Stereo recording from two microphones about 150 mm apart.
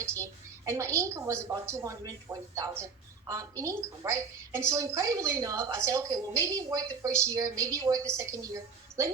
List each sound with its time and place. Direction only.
0.0 s a woman's voice: 20° right (ahead or behind)